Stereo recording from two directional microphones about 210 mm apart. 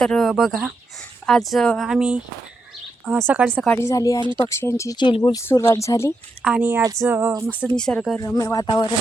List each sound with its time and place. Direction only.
0.0 s speech: centre (ahead or behind)
3.5 s speech: 5° left (ahead or behind)
4.2 s speech: 20° right (ahead or behind)
4.4 s speech: 15° left (ahead or behind)
6.4 s speech: 5° right (ahead or behind)
7.8 s speech: 5° left (ahead or behind)
8.2 s speech: 15° left (ahead or behind)